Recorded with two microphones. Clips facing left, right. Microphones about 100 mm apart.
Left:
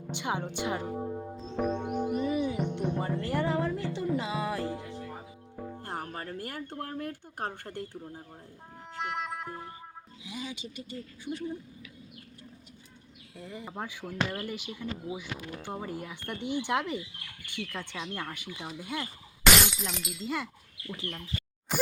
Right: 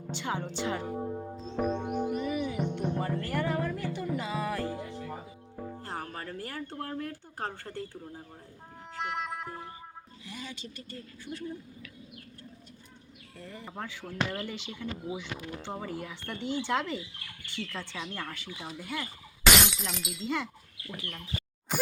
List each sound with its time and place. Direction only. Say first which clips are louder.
0.1 s speech: left 1 dB; 15° left (ahead or behind)
0.9 s music: even; centre (ahead or behind)
2.2 s music: left 2 dB; 20° left (ahead or behind)
4.7 s music: right 1 dB; 5° right (ahead or behind)
5.8 s a sound: left 2 dB; 15° left (ahead or behind)
6.7 s speech: even; 10° left (ahead or behind)
9.0 s music: even; centre (ahead or behind)
10.2 s speech: left 3 dB; 10° left (ahead or behind)
13.3 s speech: left 2 dB; 10° left (ahead or behind)
19.6 s speech: even; centre (ahead or behind)